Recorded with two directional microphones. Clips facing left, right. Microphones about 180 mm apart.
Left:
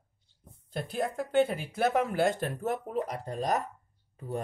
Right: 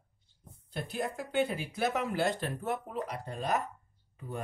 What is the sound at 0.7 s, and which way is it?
Speech, 50° left (ahead or behind).